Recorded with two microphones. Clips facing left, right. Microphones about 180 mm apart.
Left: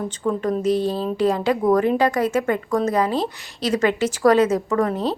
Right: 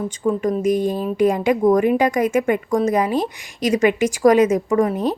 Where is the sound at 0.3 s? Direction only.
10° right (ahead or behind).